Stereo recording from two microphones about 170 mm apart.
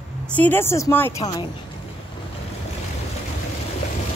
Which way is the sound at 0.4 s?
15° left (ahead or behind).